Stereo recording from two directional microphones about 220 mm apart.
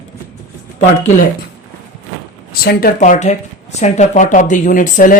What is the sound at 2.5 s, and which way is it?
Speech, 40° left (ahead or behind).